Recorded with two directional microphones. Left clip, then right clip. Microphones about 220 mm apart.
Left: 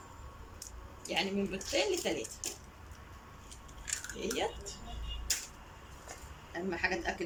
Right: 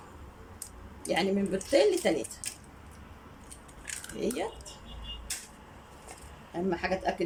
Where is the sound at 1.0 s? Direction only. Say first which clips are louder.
Right 5 dB; 25° right (ahead or behind).